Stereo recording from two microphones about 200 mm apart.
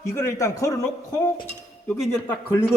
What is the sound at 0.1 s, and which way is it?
Speech, 15° left (ahead or behind).